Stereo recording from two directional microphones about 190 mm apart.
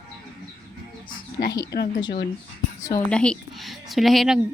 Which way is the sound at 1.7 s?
55° left (ahead or behind).